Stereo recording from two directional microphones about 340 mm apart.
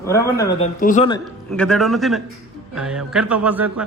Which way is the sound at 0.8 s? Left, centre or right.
Left.